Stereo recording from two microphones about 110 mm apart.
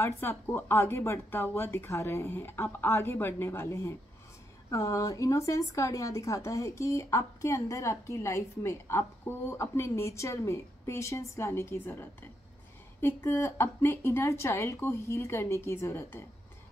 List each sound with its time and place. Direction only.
0.2 s speech: 20° left (ahead or behind)